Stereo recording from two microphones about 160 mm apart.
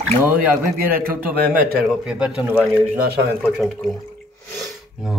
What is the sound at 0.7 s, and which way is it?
Speech, 65° right (ahead or behind).